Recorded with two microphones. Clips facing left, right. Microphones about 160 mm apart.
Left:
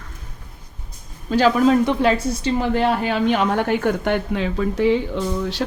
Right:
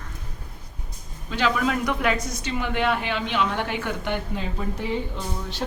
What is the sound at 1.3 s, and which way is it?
Speech, 35° left (ahead or behind).